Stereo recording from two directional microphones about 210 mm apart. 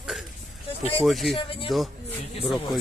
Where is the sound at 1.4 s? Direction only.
25° left (ahead or behind).